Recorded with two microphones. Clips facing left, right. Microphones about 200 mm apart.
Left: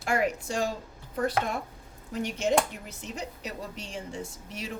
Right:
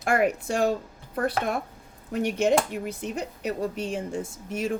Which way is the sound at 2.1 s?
60° right (ahead or behind).